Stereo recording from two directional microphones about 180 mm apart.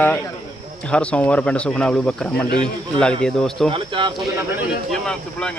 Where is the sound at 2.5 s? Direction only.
25° right (ahead or behind).